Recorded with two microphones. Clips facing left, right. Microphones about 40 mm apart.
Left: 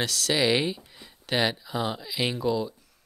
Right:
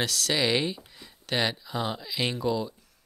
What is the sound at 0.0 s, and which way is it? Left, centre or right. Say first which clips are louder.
Speech: left 2 dB; centre.